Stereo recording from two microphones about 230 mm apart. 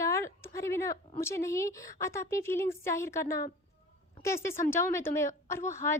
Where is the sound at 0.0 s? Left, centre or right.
Centre.